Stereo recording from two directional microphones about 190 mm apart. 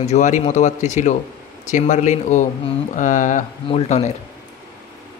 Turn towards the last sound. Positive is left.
turn(degrees=35)  # may be behind; listen again after turning